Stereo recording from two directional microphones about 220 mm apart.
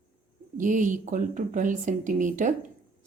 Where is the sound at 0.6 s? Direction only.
35° right (ahead or behind).